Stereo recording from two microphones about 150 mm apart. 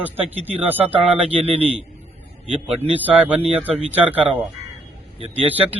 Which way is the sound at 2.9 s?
10° right (ahead or behind).